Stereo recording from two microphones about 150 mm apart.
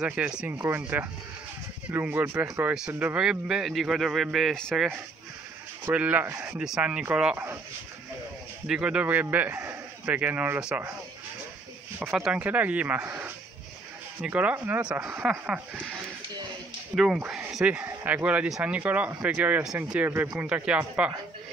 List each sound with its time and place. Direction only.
0.0 s speech: 5° right (ahead or behind)
5.9 s speech: 10° right (ahead or behind)
8.6 s speech: 5° right (ahead or behind)
12.1 s speech: 5° right (ahead or behind)
16.9 s speech: 5° right (ahead or behind)